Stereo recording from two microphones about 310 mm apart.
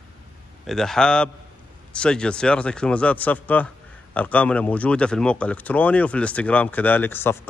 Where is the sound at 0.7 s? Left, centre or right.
Centre.